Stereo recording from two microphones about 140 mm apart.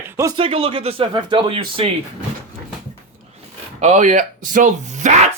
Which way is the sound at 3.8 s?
55° right (ahead or behind).